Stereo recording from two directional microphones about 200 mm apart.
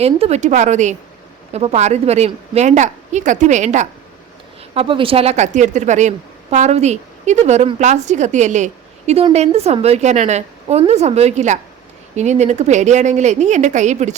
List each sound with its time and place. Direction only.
0.0 s a woman's voice: 30° right (ahead or behind)